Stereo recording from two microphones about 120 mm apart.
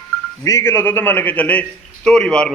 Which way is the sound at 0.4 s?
25° left (ahead or behind).